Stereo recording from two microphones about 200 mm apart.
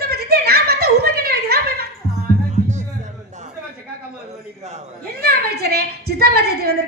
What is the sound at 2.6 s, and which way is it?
Music, 35° right (ahead or behind).